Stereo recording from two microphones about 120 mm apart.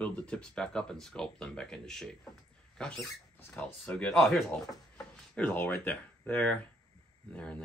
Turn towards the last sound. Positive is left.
turn(degrees=10)  # may be behind; listen again after turning